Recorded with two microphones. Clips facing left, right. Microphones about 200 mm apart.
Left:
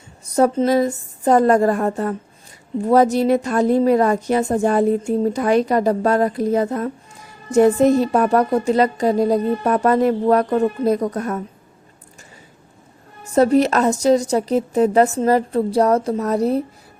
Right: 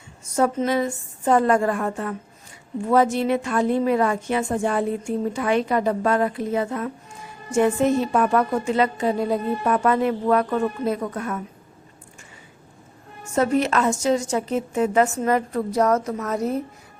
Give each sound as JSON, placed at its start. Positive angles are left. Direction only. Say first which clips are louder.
{"t": 0.3, "sound": "a woman's voice", "louder": "left 5 dB", "side_deg": 35}
{"t": 13.2, "sound": "a woman's voice", "louder": "left 6 dB", "side_deg": 35}